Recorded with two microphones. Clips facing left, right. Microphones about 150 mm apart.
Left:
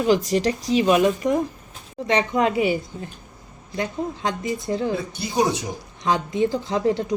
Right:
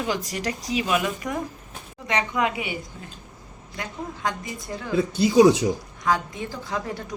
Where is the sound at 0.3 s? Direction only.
25° left (ahead or behind).